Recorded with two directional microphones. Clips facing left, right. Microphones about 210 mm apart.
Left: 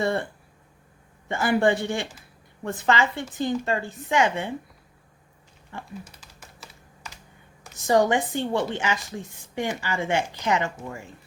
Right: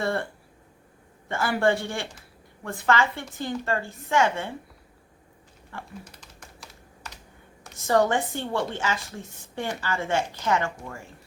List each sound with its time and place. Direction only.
0.0 s a woman's voice: 15° left (ahead or behind)
1.3 s a woman's voice: 20° left (ahead or behind)
5.7 s a woman's voice: 20° left (ahead or behind)
6.1 s typing: 5° left (ahead or behind)
7.8 s a woman's voice: 15° left (ahead or behind)